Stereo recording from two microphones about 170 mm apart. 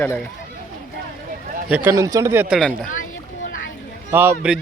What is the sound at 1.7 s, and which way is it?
Speech, 15° right (ahead or behind).